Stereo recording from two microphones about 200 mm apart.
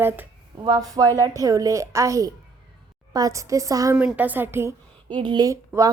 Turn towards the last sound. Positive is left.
turn(degrees=-15)  # may be behind; listen again after turning